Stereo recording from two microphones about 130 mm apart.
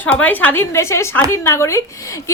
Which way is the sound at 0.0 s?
10° left (ahead or behind).